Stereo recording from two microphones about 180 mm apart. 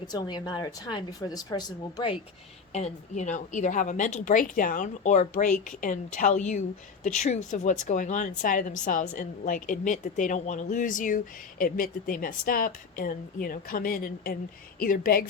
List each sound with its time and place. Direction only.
0.1 s a woman's voice: 25° left (ahead or behind)
2.7 s a woman's voice: 40° left (ahead or behind)